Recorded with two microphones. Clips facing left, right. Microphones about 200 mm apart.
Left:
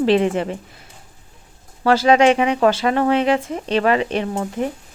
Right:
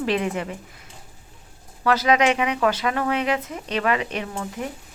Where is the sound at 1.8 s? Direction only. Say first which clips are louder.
Left 6 dB; 30° left (ahead or behind).